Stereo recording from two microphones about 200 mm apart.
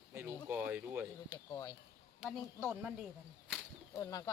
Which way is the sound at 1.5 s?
15° left (ahead or behind).